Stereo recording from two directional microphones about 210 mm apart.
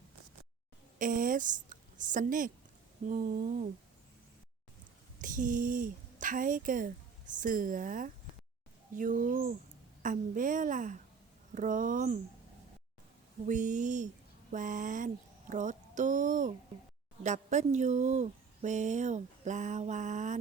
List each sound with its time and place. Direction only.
0.9 s a woman's voice: 40° right (ahead or behind)
5.2 s speech: 40° right (ahead or behind)
13.4 s speech: 35° right (ahead or behind)